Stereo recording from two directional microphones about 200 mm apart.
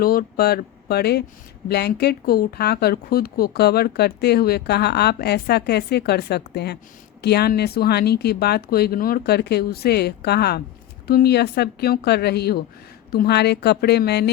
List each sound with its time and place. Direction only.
0.0 s speech: 50° left (ahead or behind)